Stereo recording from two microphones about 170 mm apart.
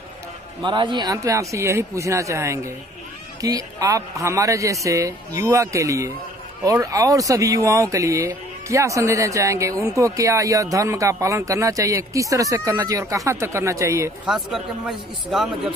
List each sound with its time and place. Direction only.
0.6 s speech: 25° right (ahead or behind)
14.2 s speech: 5° right (ahead or behind)